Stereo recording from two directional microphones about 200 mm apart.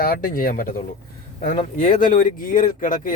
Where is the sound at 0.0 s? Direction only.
45° left (ahead or behind).